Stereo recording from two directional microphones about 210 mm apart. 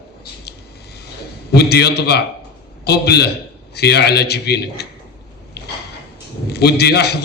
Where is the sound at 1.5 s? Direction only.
50° left (ahead or behind).